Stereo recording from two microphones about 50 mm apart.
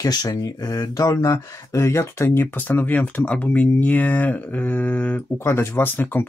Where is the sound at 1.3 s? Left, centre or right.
Left.